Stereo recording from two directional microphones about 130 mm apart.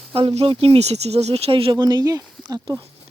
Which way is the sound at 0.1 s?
45° right (ahead or behind).